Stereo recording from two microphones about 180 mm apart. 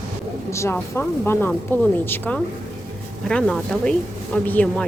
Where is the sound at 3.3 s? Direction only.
5° left (ahead or behind).